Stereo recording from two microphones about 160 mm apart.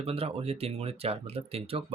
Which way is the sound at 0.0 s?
35° right (ahead or behind).